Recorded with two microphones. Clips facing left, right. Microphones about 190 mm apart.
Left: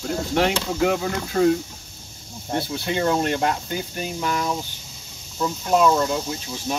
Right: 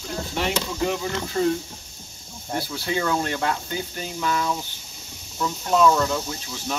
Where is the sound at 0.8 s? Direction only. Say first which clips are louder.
Left 5 dB; 60° left (ahead or behind).